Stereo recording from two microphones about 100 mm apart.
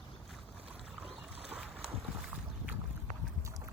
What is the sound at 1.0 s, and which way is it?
Boat, 15° right (ahead or behind).